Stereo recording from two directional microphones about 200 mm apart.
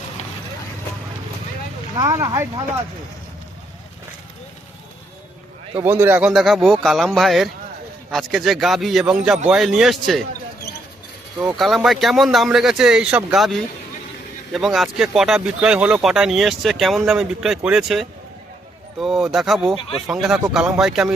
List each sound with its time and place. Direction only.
2.0 s speech: 15° right (ahead or behind)
5.8 s speech: 10° right (ahead or behind)
11.3 s speech: 5° right (ahead or behind)